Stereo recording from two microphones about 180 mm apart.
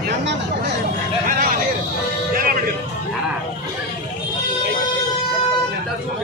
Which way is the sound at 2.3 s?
50° right (ahead or behind).